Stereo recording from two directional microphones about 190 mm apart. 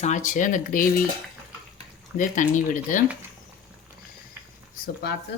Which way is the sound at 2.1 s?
40° left (ahead or behind).